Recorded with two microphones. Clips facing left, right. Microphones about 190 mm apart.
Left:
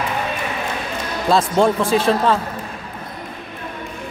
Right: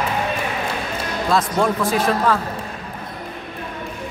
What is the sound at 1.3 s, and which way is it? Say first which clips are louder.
Speech: left 4 dB; 30° left (ahead or behind).